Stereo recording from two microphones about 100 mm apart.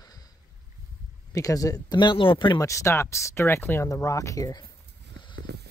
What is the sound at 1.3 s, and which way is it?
Speech, 35° left (ahead or behind).